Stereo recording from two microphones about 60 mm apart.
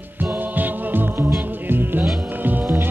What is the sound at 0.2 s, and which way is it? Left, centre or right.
Music, right.